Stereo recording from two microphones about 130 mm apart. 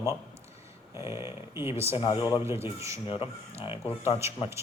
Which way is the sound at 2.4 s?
20° right (ahead or behind).